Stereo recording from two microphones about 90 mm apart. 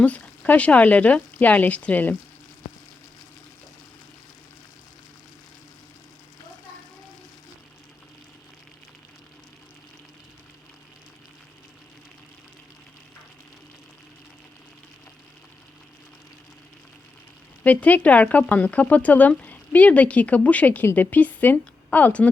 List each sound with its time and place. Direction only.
0.0 s speech: 15° left (ahead or behind)
17.6 s a woman's voice: 15° left (ahead or behind)